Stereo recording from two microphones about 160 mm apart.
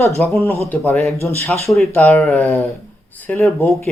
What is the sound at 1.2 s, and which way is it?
Speech, 15° left (ahead or behind).